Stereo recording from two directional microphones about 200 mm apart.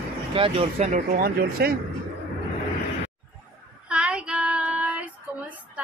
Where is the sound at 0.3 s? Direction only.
30° right (ahead or behind); by 1.8 s 50° right (ahead or behind).